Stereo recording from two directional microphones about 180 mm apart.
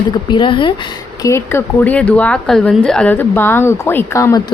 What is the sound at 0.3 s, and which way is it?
Speech, 25° left (ahead or behind).